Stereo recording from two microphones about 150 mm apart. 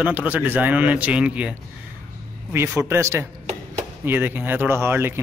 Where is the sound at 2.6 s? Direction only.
15° right (ahead or behind).